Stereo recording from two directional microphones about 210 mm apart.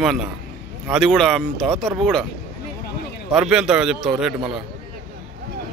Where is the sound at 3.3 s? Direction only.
5° right (ahead or behind).